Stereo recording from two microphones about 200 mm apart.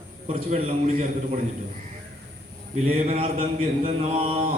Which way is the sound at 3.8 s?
30° right (ahead or behind).